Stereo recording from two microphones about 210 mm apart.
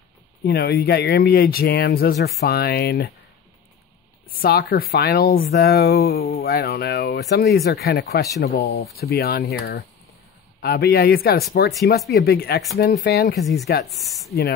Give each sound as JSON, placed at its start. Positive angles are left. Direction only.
{"t": 0.5, "sound": "speech", "side_deg": 50}
{"t": 4.3, "sound": "speech", "side_deg": 45}
{"t": 13.4, "sound": "speech", "side_deg": 0}